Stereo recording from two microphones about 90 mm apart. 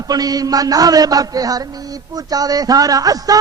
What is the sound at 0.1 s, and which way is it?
A man's voice, 45° right (ahead or behind).